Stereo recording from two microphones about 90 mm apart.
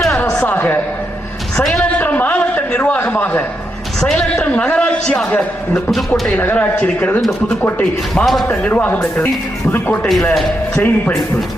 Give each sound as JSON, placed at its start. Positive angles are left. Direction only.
{"t": 0.4, "sound": "a sound", "side_deg": 20}
{"t": 1.5, "sound": "a woman's voice", "side_deg": 5}
{"t": 1.8, "sound": "a sound", "side_deg": 20}
{"t": 4.0, "sound": "a man's voice", "side_deg": 10}
{"t": 4.4, "sound": "a man's voice", "side_deg": 20}
{"t": 8.1, "sound": "a man's voice", "side_deg": 0}
{"t": 8.6, "sound": "a man's voice", "side_deg": 15}